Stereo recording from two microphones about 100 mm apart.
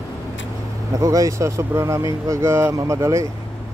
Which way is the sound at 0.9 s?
35° right (ahead or behind).